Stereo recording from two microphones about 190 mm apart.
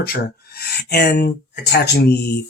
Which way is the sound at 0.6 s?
60° left (ahead or behind).